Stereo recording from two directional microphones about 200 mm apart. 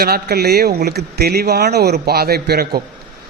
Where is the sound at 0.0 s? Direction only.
50° right (ahead or behind).